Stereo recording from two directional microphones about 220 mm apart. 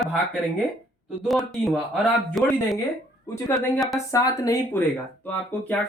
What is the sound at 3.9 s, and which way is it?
Speech, 15° left (ahead or behind).